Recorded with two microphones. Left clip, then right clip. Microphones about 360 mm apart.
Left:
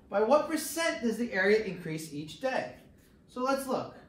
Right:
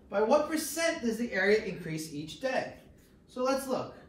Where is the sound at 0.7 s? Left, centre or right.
Centre.